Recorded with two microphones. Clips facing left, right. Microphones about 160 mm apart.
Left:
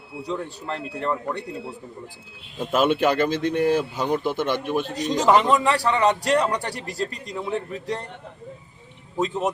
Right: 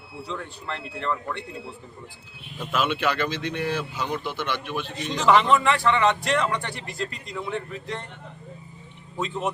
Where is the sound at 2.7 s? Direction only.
45° left (ahead or behind).